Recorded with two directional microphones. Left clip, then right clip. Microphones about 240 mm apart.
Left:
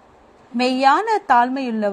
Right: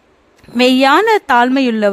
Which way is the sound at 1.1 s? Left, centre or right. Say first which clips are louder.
Right 4 dB; right.